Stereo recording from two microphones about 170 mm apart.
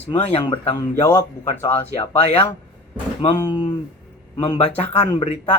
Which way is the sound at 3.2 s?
25° left (ahead or behind).